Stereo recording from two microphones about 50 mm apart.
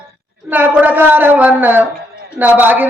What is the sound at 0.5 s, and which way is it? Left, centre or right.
A woman's voice, right.